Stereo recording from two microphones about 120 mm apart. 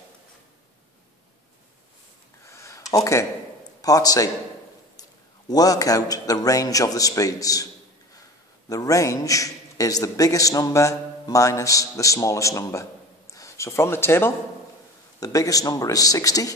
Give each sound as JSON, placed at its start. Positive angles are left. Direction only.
{"t": 2.4, "sound": "a sound", "side_deg": 25}
{"t": 3.8, "sound": "a man's voice", "side_deg": 30}
{"t": 5.5, "sound": "a man's voice", "side_deg": 30}
{"t": 8.6, "sound": "a man's voice", "side_deg": 30}